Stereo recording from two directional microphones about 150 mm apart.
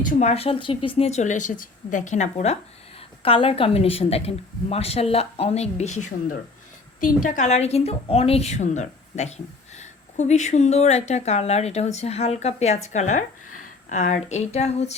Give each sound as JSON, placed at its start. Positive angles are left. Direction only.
{"t": 0.0, "sound": "a woman's voice", "side_deg": 55}